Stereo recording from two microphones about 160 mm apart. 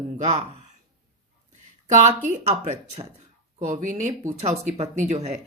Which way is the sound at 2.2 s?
50° right (ahead or behind).